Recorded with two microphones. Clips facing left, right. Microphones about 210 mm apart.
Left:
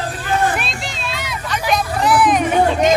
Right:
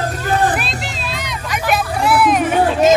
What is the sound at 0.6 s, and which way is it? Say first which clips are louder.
Vehicle: right 1 dB; centre (ahead or behind).